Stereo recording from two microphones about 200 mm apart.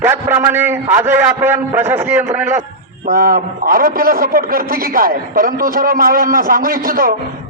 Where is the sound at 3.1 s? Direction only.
45° right (ahead or behind).